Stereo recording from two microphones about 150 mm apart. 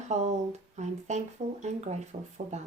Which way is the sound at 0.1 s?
50° right (ahead or behind).